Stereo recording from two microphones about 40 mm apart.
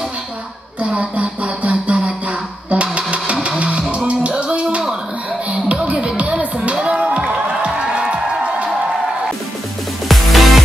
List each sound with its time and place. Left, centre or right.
0.7 s a sound: right
3.4 s music: right
8.0 s music: centre
10.0 s music: centre